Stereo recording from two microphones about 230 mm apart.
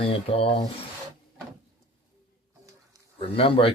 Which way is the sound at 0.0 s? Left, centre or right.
Left.